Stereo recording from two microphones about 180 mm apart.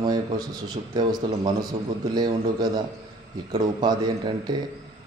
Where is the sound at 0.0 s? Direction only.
25° right (ahead or behind).